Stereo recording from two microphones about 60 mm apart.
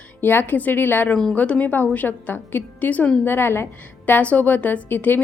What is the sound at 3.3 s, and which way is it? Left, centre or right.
Speech, left.